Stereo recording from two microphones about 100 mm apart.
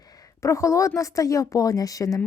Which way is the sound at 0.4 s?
30° left (ahead or behind).